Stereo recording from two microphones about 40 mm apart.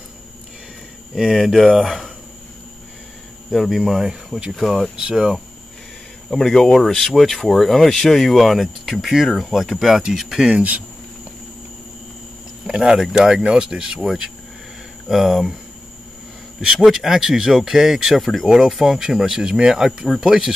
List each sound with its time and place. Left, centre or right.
1.1 s speech: centre
3.5 s speech: centre
4.9 s speech: centre
6.3 s speech: centre
12.6 s speech: centre
13.4 s speech: right; by 15.4 s centre
16.5 s speech: centre